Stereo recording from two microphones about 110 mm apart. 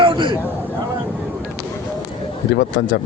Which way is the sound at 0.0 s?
50° right (ahead or behind).